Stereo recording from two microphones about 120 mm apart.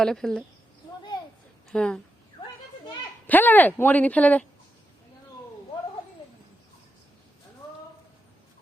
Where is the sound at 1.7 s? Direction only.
5° left (ahead or behind).